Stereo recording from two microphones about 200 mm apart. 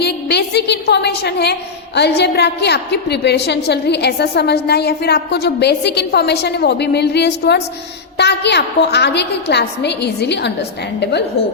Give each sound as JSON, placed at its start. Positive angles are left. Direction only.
{"t": 0.0, "sound": "a woman's voice", "side_deg": 55}